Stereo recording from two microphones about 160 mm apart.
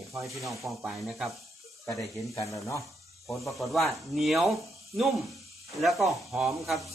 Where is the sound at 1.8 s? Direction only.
20° left (ahead or behind).